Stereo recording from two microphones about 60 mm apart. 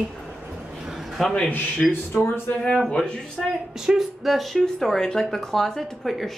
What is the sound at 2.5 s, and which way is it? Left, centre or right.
Speech, left.